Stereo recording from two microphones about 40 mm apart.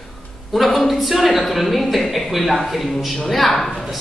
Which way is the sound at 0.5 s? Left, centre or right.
Centre.